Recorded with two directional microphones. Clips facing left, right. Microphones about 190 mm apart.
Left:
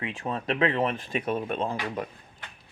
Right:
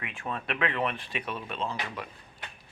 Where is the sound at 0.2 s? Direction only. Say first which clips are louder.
Left 5 dB; 35° left (ahead or behind).